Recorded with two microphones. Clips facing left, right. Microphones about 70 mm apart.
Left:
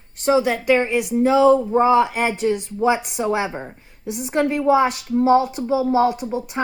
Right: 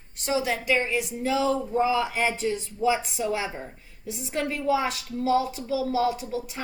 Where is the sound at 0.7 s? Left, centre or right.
Left.